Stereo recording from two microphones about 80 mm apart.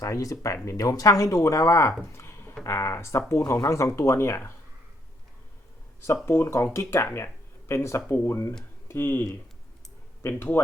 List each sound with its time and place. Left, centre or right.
0.0 s speech: left
2.1 s a sound: left
2.6 s speech: left
6.2 s speech: left
10.2 s speech: left